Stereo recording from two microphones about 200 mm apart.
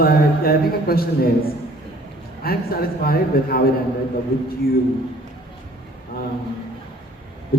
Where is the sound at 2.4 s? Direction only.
50° left (ahead or behind).